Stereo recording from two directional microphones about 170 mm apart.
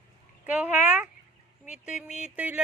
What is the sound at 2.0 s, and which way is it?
Speech, 5° right (ahead or behind).